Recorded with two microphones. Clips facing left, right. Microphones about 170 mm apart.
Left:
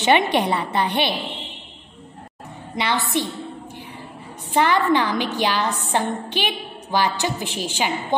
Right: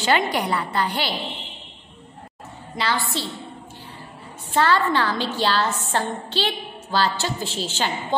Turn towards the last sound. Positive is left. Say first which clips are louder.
# left 2 dB
turn(degrees=15)  # may be behind; listen again after turning